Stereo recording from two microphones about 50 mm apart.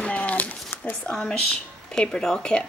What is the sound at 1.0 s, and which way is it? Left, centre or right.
A woman's voice, centre.